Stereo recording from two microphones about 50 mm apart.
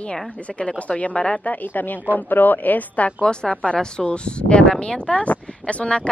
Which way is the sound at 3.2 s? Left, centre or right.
Centre.